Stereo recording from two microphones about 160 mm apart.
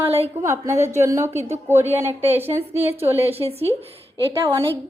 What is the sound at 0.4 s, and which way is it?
A woman's voice, 20° right (ahead or behind).